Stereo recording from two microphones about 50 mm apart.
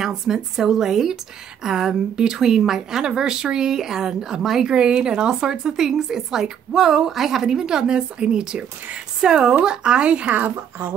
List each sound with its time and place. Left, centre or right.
0.0 s a woman's voice: centre
10.2 s speech: right
10.5 s a woman's voice: right